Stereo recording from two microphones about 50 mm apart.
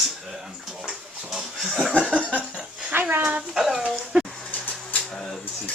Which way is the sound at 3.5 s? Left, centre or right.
Centre.